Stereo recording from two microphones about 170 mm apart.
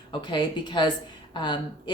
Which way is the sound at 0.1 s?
30° left (ahead or behind).